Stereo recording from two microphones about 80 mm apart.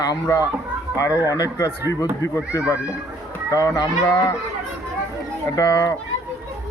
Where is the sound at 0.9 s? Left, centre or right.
Left.